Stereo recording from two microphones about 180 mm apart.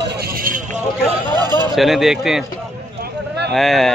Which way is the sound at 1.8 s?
Centre (ahead or behind).